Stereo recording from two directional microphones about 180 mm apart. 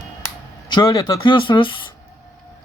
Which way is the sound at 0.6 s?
25° left (ahead or behind).